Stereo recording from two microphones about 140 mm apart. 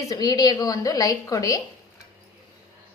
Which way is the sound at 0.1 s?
30° left (ahead or behind).